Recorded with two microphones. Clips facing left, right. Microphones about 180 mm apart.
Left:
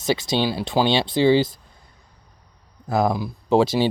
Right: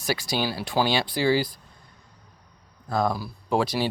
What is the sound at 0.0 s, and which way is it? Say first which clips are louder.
Speech: left 5 dB; 20° left (ahead or behind).